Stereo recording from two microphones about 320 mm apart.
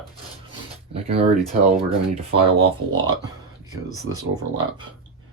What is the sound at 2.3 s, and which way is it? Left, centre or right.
Speech, centre.